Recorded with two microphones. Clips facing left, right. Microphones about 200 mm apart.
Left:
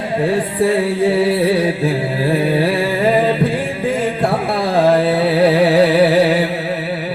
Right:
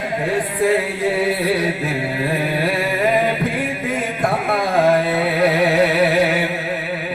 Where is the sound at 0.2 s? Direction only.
30° left (ahead or behind).